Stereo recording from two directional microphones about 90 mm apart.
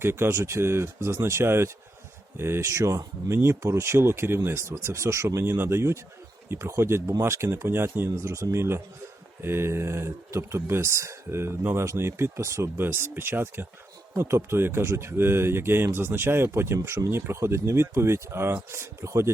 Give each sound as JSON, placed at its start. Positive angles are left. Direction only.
{"t": 0.0, "sound": "speech", "side_deg": -25}